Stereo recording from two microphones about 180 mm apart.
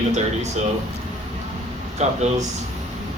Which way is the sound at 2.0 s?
40° right (ahead or behind).